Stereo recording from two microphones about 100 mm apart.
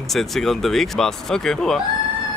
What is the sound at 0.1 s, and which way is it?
Speech, centre (ahead or behind).